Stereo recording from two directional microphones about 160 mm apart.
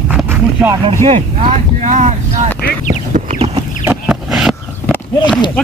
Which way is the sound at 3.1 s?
50° right (ahead or behind).